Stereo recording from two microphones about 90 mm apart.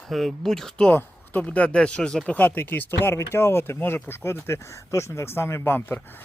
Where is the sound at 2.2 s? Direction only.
20° left (ahead or behind).